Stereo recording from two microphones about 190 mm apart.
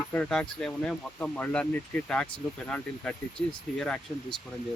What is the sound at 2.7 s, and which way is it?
Speech, 5° left (ahead or behind).